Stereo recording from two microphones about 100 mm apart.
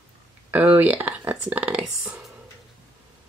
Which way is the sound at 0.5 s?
15° right (ahead or behind).